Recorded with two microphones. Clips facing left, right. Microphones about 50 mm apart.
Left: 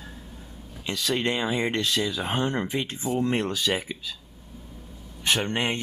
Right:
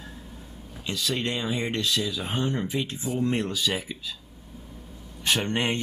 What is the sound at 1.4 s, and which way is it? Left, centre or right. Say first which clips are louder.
Speech: left 3 dB; left.